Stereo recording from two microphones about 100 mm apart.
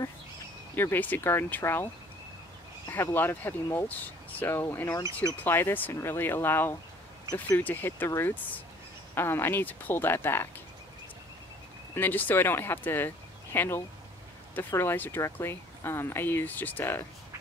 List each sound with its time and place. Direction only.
0.7 s speech: 20° left (ahead or behind)
2.9 s speech: 20° left (ahead or behind)
11.9 s speech: 20° left (ahead or behind)